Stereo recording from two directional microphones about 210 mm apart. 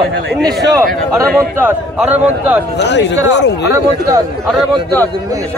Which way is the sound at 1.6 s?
10° right (ahead or behind).